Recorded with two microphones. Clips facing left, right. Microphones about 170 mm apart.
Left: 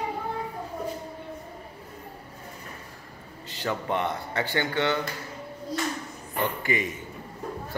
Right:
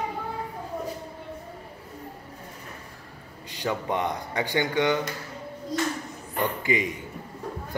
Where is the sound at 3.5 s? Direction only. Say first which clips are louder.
Right 1 dB; 15° right (ahead or behind).